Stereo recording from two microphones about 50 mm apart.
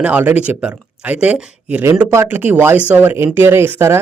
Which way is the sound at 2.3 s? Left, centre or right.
Right.